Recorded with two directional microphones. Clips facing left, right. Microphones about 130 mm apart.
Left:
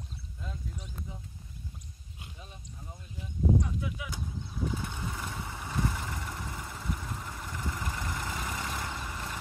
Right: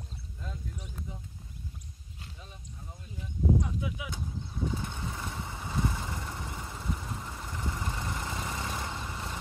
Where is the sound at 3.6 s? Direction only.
10° right (ahead or behind).